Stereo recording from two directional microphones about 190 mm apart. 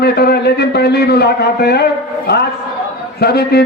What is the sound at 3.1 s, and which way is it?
Speech, 55° left (ahead or behind).